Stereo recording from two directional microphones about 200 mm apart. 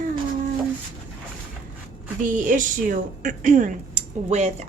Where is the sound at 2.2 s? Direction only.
40° right (ahead or behind).